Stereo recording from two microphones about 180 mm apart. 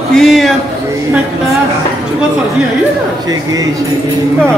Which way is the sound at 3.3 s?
20° right (ahead or behind).